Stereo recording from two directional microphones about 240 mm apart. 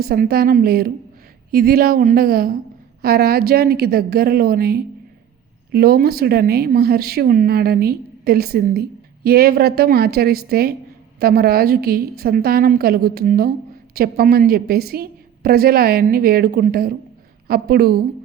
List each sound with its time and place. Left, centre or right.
0.0 s a woman's voice: right